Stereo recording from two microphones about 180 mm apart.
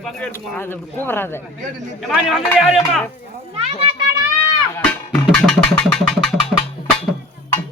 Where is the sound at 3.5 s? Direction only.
30° right (ahead or behind).